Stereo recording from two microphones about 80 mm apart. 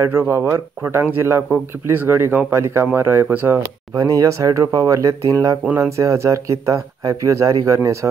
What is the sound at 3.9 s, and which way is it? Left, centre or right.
Speech, right.